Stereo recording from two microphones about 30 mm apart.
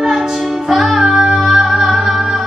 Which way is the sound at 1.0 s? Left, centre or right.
Right.